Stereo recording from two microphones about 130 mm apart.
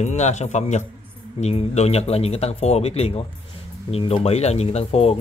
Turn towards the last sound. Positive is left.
turn(degrees=50)  # may be behind; listen again after turning